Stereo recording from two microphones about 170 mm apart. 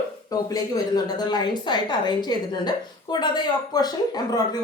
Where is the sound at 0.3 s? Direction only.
20° left (ahead or behind).